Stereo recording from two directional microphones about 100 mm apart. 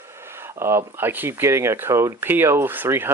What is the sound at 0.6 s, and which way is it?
Speech, 25° right (ahead or behind).